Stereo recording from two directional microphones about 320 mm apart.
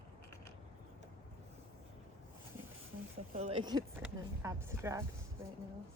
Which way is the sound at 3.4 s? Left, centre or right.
Centre.